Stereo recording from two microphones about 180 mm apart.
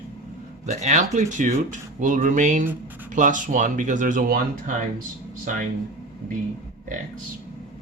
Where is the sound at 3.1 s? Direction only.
45° right (ahead or behind).